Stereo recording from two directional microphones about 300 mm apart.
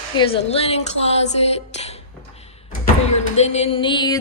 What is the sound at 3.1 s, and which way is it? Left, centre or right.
Music, left.